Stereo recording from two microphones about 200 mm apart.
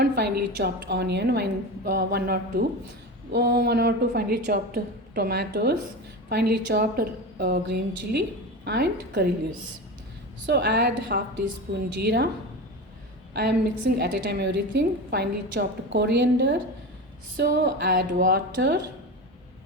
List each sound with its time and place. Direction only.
0.0 s a woman's voice: 55° right (ahead or behind)
10.4 s a woman's voice: 60° right (ahead or behind)
14.0 s a woman's voice: 55° right (ahead or behind)